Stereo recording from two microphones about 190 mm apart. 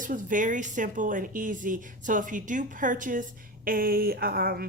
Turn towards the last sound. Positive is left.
turn(degrees=-50)  # may be behind; listen again after turning